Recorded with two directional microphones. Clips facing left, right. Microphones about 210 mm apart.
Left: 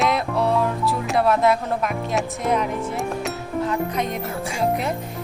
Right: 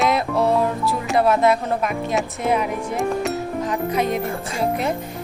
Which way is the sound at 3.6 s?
15° right (ahead or behind).